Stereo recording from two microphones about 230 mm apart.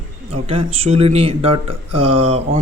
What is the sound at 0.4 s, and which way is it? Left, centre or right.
A man's voice, right.